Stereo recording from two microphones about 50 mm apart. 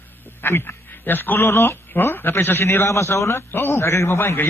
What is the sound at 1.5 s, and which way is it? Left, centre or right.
Speech, left.